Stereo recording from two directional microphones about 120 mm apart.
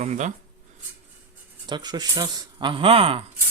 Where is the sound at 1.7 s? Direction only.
35° right (ahead or behind); by 3.2 s 50° right (ahead or behind).